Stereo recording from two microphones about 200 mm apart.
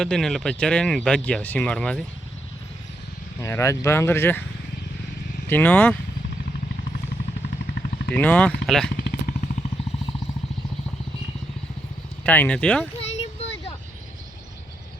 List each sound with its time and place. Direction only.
0.0 s speech: 5° left (ahead or behind)
3.4 s speech: 15° left (ahead or behind)
5.5 s speech: 10° left (ahead or behind)
8.1 s speech: 10° left (ahead or behind)
9.0 s vehicle: 45° left (ahead or behind)
12.2 s speech: 10° left (ahead or behind)
13.0 s a sound: 30° left (ahead or behind)